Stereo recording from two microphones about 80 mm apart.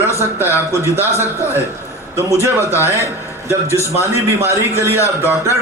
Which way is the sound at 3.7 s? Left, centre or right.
Left.